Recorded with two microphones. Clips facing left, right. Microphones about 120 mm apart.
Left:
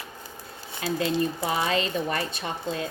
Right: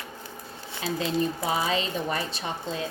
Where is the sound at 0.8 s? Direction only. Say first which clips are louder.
Left 1 dB; centre (ahead or behind).